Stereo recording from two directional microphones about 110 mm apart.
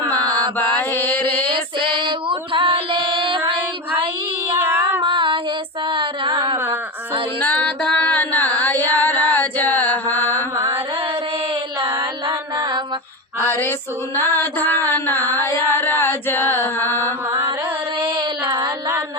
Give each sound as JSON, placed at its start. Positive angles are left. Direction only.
{"t": 0.0, "sound": "mantra", "side_deg": 15}
{"t": 1.5, "sound": "female singing", "side_deg": -50}
{"t": 4.5, "sound": "child singing", "side_deg": -20}
{"t": 5.0, "sound": "female singing", "side_deg": -50}
{"t": 5.9, "sound": "a sound", "side_deg": -50}
{"t": 7.4, "sound": "music", "side_deg": 10}
{"t": 13.5, "sound": "female singing", "side_deg": 20}
{"t": 14.3, "sound": "music", "side_deg": 15}
{"t": 18.0, "sound": "a sound", "side_deg": -25}